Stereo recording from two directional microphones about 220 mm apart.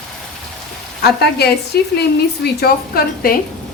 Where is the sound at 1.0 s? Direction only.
45° left (ahead or behind).